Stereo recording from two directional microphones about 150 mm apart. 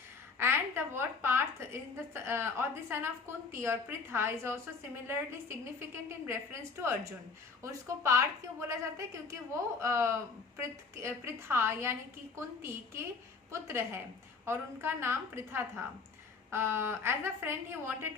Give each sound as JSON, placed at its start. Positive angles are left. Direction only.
{"t": 0.3, "sound": "a woman's voice", "side_deg": -15}